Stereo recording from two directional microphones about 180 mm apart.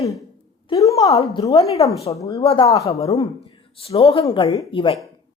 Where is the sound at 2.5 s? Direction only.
30° left (ahead or behind).